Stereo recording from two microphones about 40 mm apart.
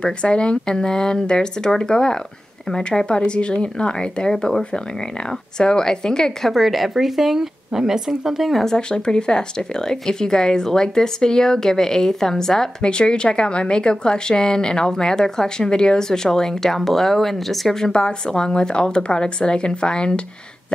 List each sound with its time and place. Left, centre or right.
0.0 s a woman's voice: left
6.5 s speech: centre
8.6 s a woman's voice: centre